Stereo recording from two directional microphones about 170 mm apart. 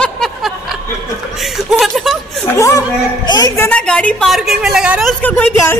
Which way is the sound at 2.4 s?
15° left (ahead or behind).